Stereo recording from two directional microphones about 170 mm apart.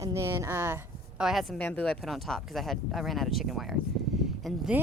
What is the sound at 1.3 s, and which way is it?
Speech, centre (ahead or behind).